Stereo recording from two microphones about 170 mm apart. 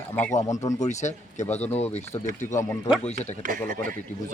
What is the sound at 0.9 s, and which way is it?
Speech, 45° left (ahead or behind).